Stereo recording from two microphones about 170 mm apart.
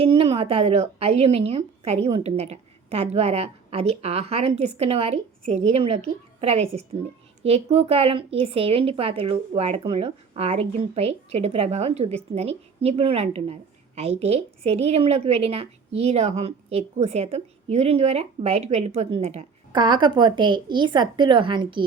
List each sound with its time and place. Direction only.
0.0 s speech: 35° right (ahead or behind)
19.7 s a woman's voice: 25° right (ahead or behind)